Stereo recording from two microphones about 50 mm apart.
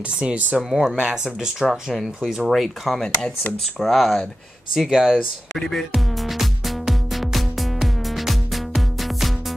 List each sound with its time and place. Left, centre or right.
0.2 s speech: right
0.6 s speech: centre
2.4 s speech: centre
3.0 s speech: centre
4.7 s speech: centre
5.5 s music: centre